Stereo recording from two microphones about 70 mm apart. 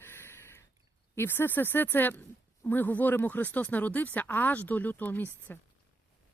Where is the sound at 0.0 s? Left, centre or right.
Left.